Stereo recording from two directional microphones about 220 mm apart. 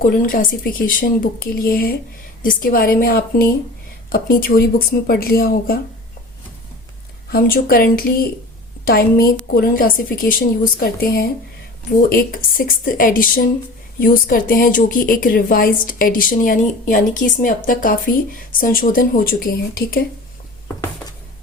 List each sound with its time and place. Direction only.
0.0 s speech: 40° left (ahead or behind)
7.3 s speech: 40° left (ahead or behind)